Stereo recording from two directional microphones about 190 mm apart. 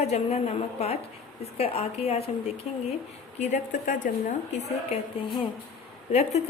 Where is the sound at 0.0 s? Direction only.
35° left (ahead or behind).